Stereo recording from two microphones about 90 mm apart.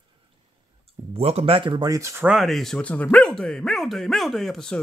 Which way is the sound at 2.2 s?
Centre (ahead or behind).